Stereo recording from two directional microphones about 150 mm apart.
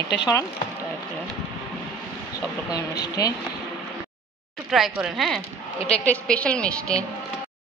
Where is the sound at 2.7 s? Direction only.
25° left (ahead or behind).